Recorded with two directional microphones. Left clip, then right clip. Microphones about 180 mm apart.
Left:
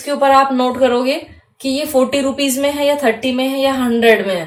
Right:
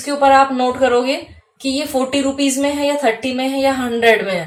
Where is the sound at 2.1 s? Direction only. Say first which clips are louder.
Left 1 dB; 40° left (ahead or behind).